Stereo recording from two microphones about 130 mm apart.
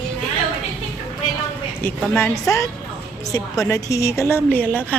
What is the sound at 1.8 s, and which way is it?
Speech, 15° left (ahead or behind).